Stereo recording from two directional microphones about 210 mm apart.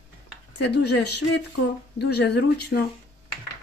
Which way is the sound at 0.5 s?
55° left (ahead or behind).